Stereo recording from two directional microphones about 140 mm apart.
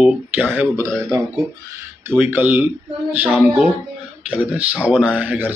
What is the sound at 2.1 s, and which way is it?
Speech, 10° right (ahead or behind).